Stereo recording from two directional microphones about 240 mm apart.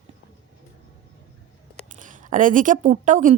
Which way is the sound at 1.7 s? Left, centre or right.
Right.